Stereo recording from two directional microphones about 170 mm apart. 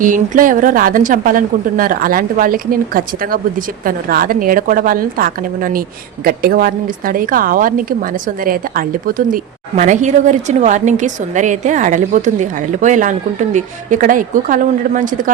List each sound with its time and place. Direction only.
0.0 s a woman's voice: 50° right (ahead or behind)